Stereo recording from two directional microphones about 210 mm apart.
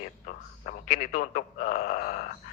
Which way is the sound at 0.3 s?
40° left (ahead or behind).